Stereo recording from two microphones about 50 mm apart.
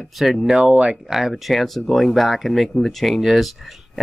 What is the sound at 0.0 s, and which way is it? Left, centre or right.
Speech, centre.